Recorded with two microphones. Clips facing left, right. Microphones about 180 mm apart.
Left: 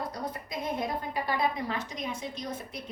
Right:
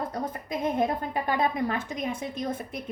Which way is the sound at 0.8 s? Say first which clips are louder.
Right 5 dB; 55° right (ahead or behind).